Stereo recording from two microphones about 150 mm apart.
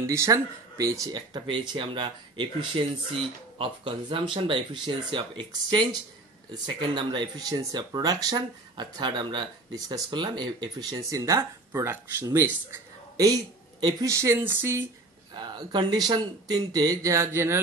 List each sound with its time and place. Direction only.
0.0 s speech: 20° right (ahead or behind)
15.3 s speech: 30° right (ahead or behind)